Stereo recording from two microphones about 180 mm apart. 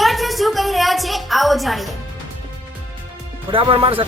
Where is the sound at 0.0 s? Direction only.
Centre (ahead or behind).